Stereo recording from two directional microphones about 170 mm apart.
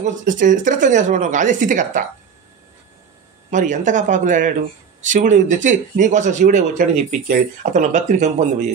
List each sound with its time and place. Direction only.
0.0 s speech: 50° right (ahead or behind)
3.4 s speech: 45° right (ahead or behind)